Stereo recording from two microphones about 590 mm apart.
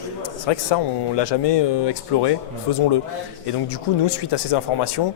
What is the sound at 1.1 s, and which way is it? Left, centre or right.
Speech, left.